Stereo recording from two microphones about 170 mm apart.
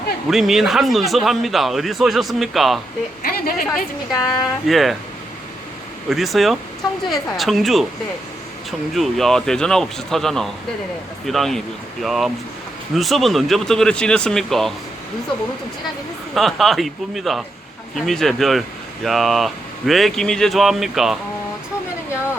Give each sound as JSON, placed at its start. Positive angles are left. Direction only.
{"t": 0.3, "sound": "speech", "side_deg": 0}
{"t": 3.2, "sound": "a woman's voice", "side_deg": 55}
{"t": 4.3, "sound": "speech", "side_deg": 0}
{"t": 6.1, "sound": "speech", "side_deg": 0}
{"t": 9.0, "sound": "speech", "side_deg": 0}
{"t": 16.3, "sound": "speech", "side_deg": 0}